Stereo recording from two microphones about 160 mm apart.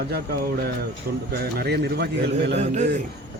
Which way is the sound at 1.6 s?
85° right.